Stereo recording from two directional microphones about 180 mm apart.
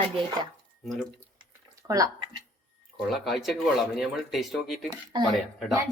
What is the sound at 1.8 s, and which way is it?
Speech, 20° right (ahead or behind).